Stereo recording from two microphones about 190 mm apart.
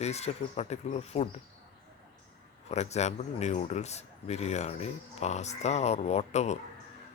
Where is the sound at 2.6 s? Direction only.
35° left (ahead or behind).